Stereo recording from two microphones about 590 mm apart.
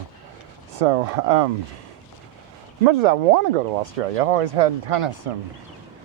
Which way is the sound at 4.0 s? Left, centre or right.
Right.